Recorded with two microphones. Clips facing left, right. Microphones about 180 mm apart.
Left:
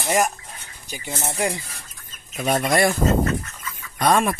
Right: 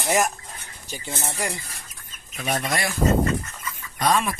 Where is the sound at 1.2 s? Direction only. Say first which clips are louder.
Left 6 dB; 20° left (ahead or behind).